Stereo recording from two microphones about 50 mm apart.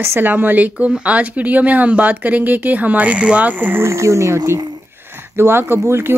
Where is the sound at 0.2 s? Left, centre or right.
Right.